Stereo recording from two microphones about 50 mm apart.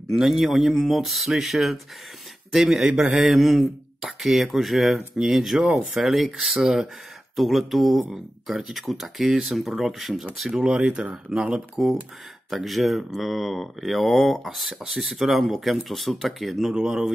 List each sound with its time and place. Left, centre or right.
0.1 s speech: centre
2.9 s a sound: centre
3.2 s speech: centre
5.9 s speech: centre
10.6 s speech: centre
12.4 s speech: centre
16.7 s speech: centre